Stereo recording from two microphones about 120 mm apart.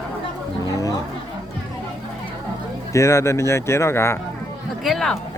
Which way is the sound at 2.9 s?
25° left (ahead or behind).